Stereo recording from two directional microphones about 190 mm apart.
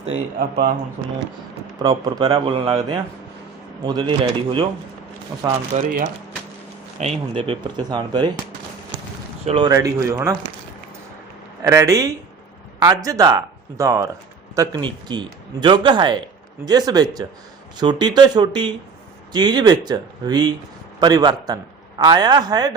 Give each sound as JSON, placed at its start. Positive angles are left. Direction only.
{"t": 0.3, "sound": "speech", "side_deg": -55}
{"t": 1.8, "sound": "a man's voice", "side_deg": -25}
{"t": 5.7, "sound": "a man's voice", "side_deg": -40}
{"t": 9.5, "sound": "a man's voice", "side_deg": -25}
{"t": 9.7, "sound": "speech", "side_deg": -15}
{"t": 11.6, "sound": "a man's voice", "side_deg": -15}